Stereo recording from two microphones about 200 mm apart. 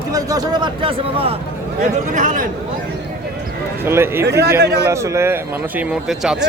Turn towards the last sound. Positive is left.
turn(degrees=-5)  # may be behind; listen again after turning